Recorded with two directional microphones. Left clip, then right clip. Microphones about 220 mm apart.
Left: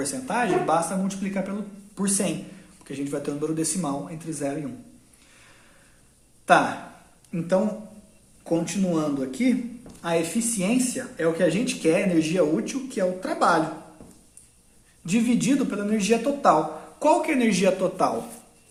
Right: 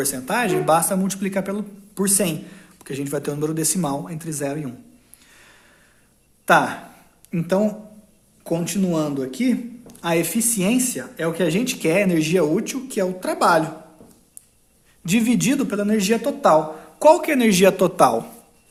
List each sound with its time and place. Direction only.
0.0 s a man's voice: 45° right (ahead or behind)
7.3 s a man's voice: 45° right (ahead or behind)
15.0 s a man's voice: 45° right (ahead or behind)